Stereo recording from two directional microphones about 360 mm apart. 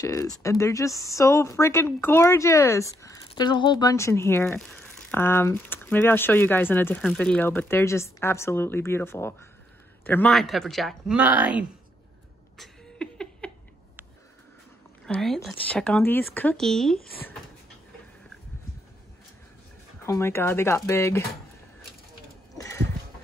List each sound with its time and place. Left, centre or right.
0.0 s speech: centre
12.5 s laughter: centre
15.0 s speech: centre
20.0 s speech: centre
22.6 s a sound: centre